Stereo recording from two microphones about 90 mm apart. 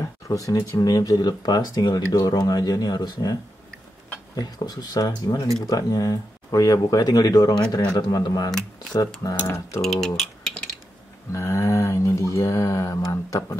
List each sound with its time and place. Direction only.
0.0 s speech: 40° left (ahead or behind)
4.4 s speech: 45° left (ahead or behind)
9.8 s speech: 5° left (ahead or behind)
11.3 s speech: 30° left (ahead or behind)